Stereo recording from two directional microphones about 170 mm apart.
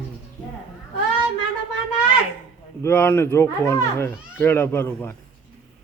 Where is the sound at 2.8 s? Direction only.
15° left (ahead or behind).